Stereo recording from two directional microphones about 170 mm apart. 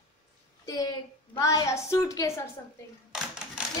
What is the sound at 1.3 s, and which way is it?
A woman's voice, 20° left (ahead or behind).